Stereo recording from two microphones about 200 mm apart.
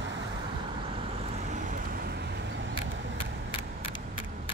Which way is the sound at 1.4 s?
40° right (ahead or behind).